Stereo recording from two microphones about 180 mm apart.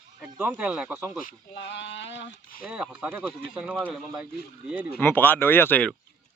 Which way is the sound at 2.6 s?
5° right (ahead or behind).